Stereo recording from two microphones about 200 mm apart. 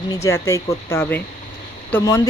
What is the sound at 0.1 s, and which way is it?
Speech, 15° left (ahead or behind).